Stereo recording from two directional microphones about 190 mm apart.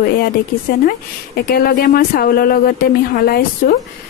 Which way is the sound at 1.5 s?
55° left (ahead or behind).